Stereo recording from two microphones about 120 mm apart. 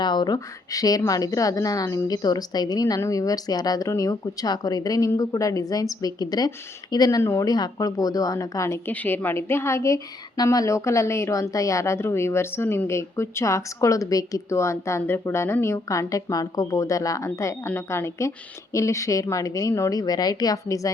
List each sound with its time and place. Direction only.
0.0 s a woman's voice: 40° left (ahead or behind)